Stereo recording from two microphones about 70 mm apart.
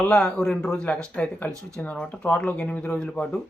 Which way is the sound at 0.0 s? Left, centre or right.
Centre.